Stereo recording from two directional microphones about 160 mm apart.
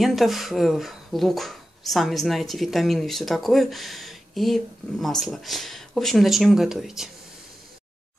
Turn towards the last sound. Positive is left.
turn(degrees=0)  # may be behind; listen again after turning